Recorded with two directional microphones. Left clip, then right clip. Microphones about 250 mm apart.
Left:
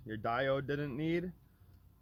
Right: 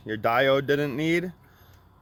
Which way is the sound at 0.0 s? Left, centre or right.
Right.